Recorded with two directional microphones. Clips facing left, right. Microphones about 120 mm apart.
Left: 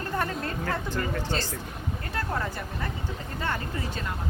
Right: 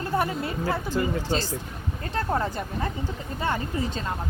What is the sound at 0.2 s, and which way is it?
Speech, 10° right (ahead or behind).